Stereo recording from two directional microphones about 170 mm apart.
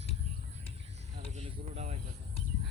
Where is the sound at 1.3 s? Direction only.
40° right (ahead or behind).